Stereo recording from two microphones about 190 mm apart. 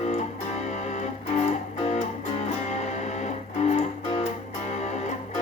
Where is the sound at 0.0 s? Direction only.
35° left (ahead or behind).